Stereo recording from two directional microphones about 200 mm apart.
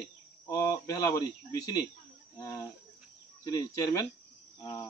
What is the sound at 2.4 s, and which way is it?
Speech, 15° left (ahead or behind).